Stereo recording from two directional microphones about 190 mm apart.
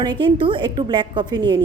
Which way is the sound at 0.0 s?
25° right (ahead or behind).